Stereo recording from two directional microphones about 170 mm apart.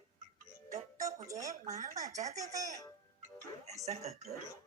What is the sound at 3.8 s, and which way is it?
Speech, 40° right (ahead or behind).